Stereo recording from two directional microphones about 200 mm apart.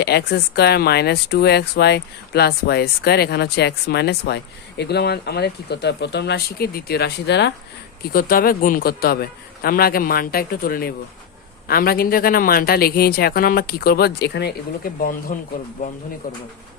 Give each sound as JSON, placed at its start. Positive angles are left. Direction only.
{"t": 0.0, "sound": "speech", "side_deg": 55}
{"t": 8.1, "sound": "speech", "side_deg": 45}